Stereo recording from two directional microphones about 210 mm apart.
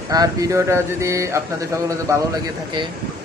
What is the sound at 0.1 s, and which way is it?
Mantra, 15° right (ahead or behind).